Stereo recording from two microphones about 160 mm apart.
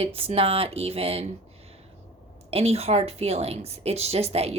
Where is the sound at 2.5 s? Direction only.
40° right (ahead or behind).